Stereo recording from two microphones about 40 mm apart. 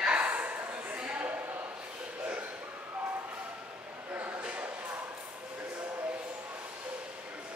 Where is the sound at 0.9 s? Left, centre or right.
Right.